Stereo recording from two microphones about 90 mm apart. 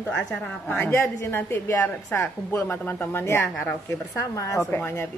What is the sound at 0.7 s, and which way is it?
A woman's voice, 25° left (ahead or behind).